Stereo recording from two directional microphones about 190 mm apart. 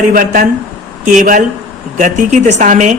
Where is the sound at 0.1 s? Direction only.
45° right (ahead or behind).